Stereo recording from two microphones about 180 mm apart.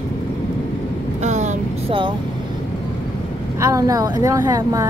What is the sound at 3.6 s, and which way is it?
A woman's voice, 20° right (ahead or behind).